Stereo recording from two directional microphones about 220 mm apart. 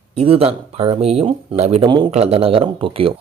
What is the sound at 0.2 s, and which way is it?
Speech, 25° right (ahead or behind).